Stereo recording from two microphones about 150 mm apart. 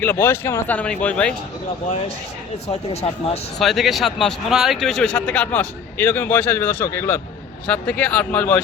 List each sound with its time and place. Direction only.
0.0 s speech: 15° left (ahead or behind)
2.6 s speech: 45° left (ahead or behind)
3.6 s speech: centre (ahead or behind)